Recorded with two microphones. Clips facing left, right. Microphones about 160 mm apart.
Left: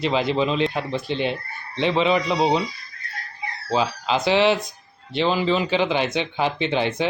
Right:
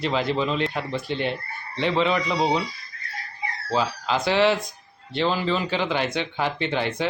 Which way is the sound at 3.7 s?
20° left (ahead or behind).